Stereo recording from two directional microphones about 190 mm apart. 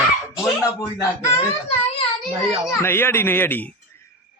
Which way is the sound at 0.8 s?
15° left (ahead or behind).